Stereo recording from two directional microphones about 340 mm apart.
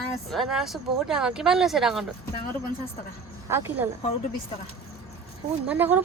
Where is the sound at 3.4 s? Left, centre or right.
Centre.